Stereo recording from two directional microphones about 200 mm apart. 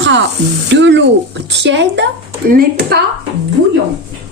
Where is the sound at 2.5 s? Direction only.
50° right (ahead or behind).